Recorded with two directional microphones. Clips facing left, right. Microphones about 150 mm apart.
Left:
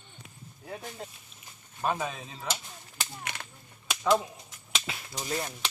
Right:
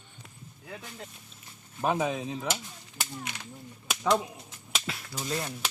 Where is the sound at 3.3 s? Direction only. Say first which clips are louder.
Left 2 dB; 60° left (ahead or behind).